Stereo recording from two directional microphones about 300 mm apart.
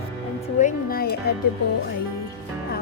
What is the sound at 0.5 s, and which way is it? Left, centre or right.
Music, left.